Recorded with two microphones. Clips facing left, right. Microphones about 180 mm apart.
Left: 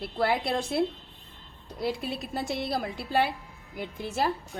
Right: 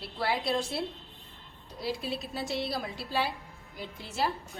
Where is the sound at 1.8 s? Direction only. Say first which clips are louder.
Left 3 dB; 55° left (ahead or behind).